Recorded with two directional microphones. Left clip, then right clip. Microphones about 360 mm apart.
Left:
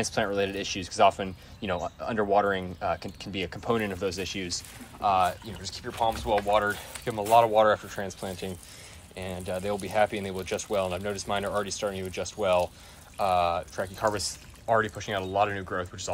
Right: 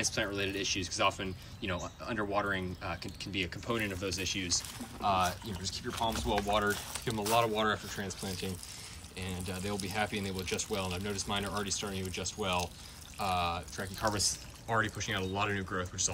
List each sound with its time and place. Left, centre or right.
0.0 s speech: centre